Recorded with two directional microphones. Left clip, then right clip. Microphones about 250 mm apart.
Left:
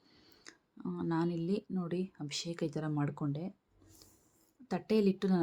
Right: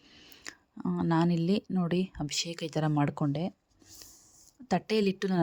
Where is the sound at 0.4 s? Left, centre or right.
Right.